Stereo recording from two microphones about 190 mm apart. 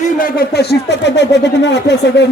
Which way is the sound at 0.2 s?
55° left (ahead or behind).